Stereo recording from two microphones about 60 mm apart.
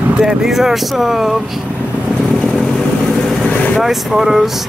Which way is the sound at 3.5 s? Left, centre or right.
Left.